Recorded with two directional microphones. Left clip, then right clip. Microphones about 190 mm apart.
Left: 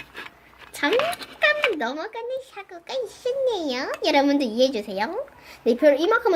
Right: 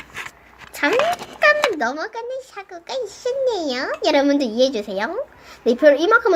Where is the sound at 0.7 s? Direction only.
5° right (ahead or behind).